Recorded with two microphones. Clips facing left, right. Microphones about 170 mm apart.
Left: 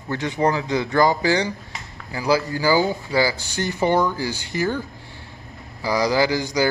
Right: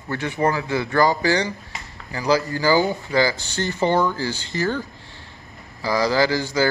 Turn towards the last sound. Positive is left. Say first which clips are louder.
# even
turn(degrees=15)  # may be behind; listen again after turning